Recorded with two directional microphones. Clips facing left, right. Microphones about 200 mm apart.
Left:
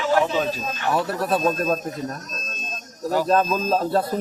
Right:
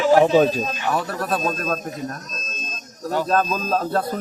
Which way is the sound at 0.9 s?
5° left (ahead or behind).